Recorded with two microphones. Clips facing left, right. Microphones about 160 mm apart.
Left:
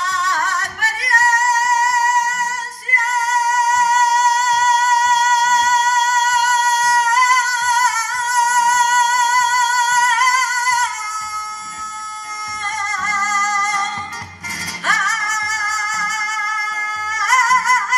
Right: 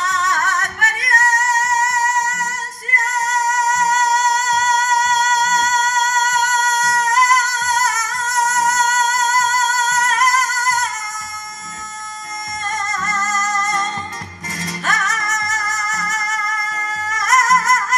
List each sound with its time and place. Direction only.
0.1 s music: 35° left (ahead or behind)
13.1 s music: 35° left (ahead or behind)
14.9 s music: 35° left (ahead or behind)